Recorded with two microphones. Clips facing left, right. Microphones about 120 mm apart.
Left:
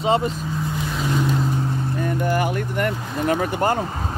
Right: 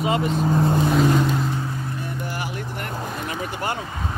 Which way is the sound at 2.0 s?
50° left (ahead or behind).